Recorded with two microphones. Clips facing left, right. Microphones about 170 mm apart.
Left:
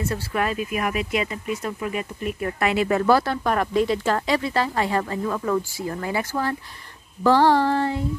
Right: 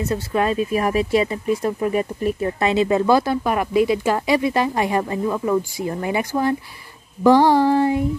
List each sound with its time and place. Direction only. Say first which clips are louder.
0.1 s speech: right 5 dB; 25° right (ahead or behind)
2.4 s speech: right 2 dB; 25° right (ahead or behind)